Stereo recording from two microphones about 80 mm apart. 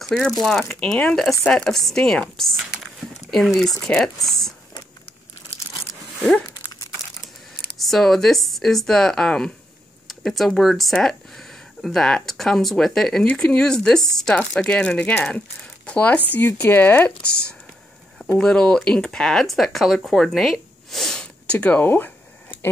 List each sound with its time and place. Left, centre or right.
0.0 s speech: centre
6.5 s crumpling: left
7.7 s speech: centre; by 17.1 s left
18.4 s speech: centre
20.9 s snort: centre; by 22.1 s left